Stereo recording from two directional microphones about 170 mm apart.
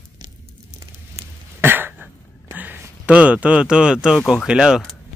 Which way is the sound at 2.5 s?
10° right (ahead or behind).